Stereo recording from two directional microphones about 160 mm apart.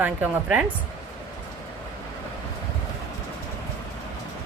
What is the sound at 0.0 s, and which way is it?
Speech, 10° right (ahead or behind).